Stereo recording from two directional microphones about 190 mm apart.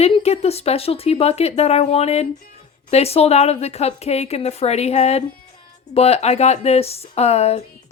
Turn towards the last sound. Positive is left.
turn(degrees=35)  # may be behind; listen again after turning